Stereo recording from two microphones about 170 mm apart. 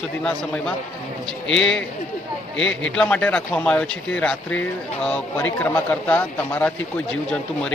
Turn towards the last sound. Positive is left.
turn(degrees=5)  # may be behind; listen again after turning